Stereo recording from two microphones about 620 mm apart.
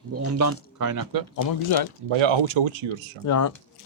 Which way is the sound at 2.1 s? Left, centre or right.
Right.